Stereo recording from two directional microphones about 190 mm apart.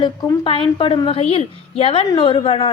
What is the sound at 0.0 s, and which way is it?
A woman's voice, 25° left (ahead or behind).